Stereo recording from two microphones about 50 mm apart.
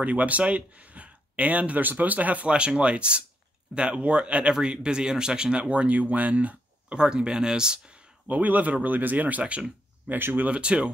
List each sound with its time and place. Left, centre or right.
0.0 s speech: right
7.0 s speech: centre
8.3 s speech: right
10.4 s speech: right